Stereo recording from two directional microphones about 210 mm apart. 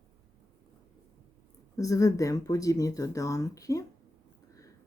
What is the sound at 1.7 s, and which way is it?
A woman's voice, 15° left (ahead or behind).